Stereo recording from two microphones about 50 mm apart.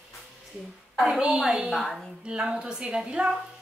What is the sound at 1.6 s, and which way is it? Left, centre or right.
Speech, centre.